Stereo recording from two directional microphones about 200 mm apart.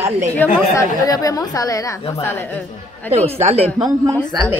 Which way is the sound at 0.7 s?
15° left (ahead or behind).